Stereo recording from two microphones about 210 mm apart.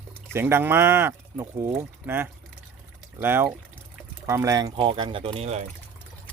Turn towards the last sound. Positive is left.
turn(degrees=-30)  # may be behind; listen again after turning